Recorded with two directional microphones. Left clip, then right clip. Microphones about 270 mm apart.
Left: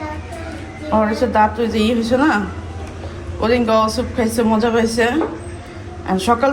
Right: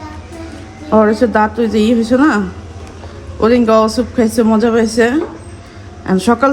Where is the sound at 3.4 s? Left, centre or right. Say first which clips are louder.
Right 5 dB; right.